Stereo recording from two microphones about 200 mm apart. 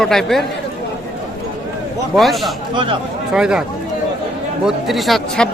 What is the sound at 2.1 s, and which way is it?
Speech, centre (ahead or behind).